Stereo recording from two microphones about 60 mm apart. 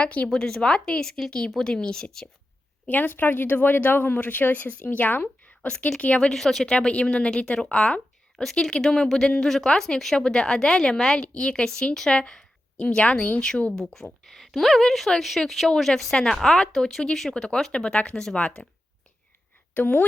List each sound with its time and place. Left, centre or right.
0.0 s a woman's voice: left
0.3 s a woman's voice: centre
2.8 s speech: left
5.5 s a sound: centre
6.0 s a woman's voice: centre
6.7 s a woman's voice: centre
8.4 s a woman's voice: centre; by 13.4 s left
13.7 s speech: centre
15.7 s a woman's voice: centre
19.7 s a woman's voice: left